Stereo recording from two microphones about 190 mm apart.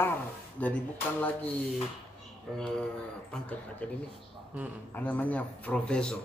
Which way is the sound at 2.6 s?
5° left (ahead or behind).